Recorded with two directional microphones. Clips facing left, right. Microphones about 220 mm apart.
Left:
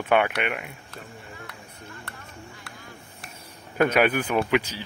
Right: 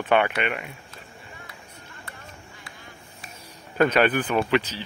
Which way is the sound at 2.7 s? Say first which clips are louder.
Left 2 dB; 65° left (ahead or behind).